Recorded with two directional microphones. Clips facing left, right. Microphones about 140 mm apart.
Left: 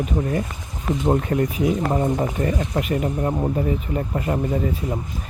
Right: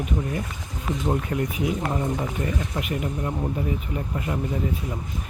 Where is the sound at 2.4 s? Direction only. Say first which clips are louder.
Left 5 dB; 40° left (ahead or behind).